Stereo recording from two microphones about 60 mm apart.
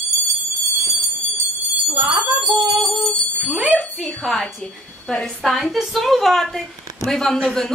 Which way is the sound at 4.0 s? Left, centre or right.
Centre.